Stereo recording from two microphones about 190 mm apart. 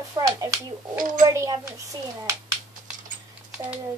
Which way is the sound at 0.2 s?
20° right (ahead or behind).